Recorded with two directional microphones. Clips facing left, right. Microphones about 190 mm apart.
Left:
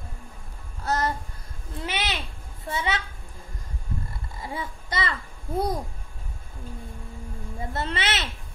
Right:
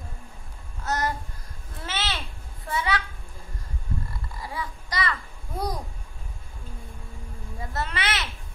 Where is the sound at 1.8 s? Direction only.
15° left (ahead or behind).